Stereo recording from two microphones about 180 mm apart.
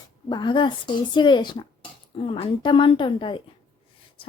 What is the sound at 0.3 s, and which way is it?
A woman's voice, 25° left (ahead or behind).